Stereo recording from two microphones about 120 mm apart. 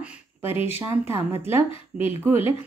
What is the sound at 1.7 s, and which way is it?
Speech, 50° left (ahead or behind).